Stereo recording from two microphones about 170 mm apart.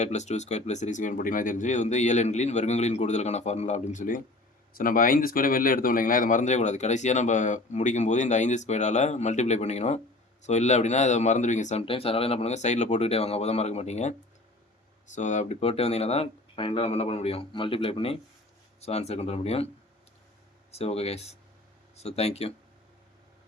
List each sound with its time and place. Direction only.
0.0 s speech: 45° left (ahead or behind)
20.7 s speech: 35° left (ahead or behind)